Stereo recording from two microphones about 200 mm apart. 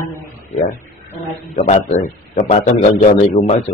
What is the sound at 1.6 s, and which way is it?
A man's voice, 35° left (ahead or behind).